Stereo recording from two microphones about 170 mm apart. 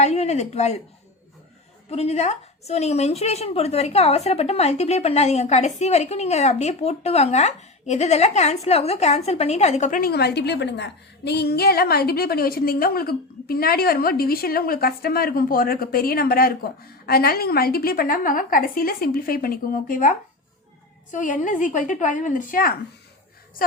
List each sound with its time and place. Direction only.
0.0 s a woman's voice: 40° left (ahead or behind)
1.9 s a woman's voice: 40° left (ahead or behind)
10.0 s a woman's voice: 70° left (ahead or behind); by 22.7 s 55° left (ahead or behind)